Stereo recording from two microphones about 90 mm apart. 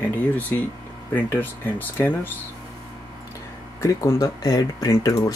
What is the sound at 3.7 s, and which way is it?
Speech, 35° left (ahead or behind).